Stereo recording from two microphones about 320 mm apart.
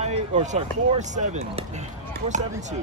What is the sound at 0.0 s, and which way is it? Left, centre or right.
Speech, right.